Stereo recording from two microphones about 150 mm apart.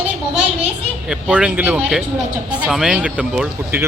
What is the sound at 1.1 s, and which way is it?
Speech, 10° right (ahead or behind).